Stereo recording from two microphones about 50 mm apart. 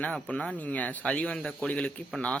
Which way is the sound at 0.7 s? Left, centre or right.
Left.